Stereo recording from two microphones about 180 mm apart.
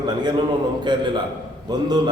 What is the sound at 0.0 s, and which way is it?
A man's voice, 25° right (ahead or behind).